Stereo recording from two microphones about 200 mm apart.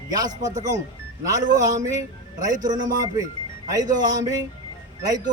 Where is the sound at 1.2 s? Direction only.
15° right (ahead or behind).